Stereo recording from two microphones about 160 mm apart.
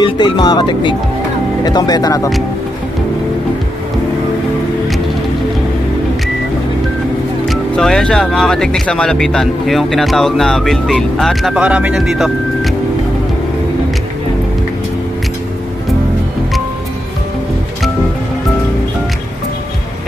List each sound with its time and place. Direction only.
0.0 s speech: 25° left (ahead or behind)
7.4 s speech: 5° left (ahead or behind)